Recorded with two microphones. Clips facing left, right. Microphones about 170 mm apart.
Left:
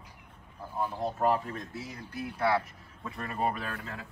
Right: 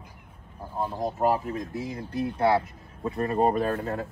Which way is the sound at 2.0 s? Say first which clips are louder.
Right 7 dB; 30° right (ahead or behind).